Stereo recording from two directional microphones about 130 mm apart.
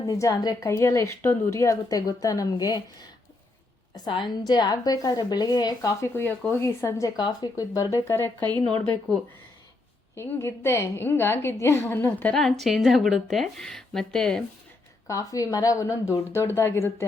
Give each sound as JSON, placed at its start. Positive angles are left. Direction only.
{"t": 0.0, "sound": "a woman's voice", "side_deg": 25}
{"t": 3.9, "sound": "a woman's voice", "side_deg": 35}
{"t": 8.4, "sound": "a woman's voice", "side_deg": -35}
{"t": 10.2, "sound": "a woman's voice", "side_deg": 20}
{"t": 12.3, "sound": "a woman's voice", "side_deg": 0}
{"t": 15.0, "sound": "a woman's voice", "side_deg": 25}